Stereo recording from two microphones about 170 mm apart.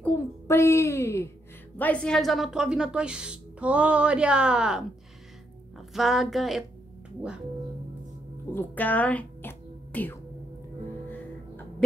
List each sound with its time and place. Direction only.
0.0 s a child's voice: 15° left (ahead or behind); by 4.8 s 5° right (ahead or behind)
5.9 s a woman's voice: centre (ahead or behind)
8.5 s speech: 10° left (ahead or behind)